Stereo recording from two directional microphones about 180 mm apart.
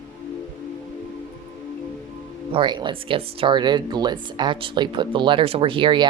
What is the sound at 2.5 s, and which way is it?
Speech, 25° right (ahead or behind).